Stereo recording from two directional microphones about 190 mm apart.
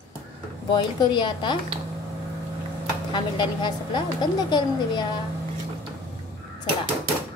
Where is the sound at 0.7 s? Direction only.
25° left (ahead or behind).